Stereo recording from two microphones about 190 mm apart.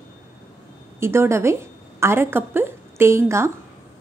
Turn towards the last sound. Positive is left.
turn(degrees=-15)  # may be behind; listen again after turning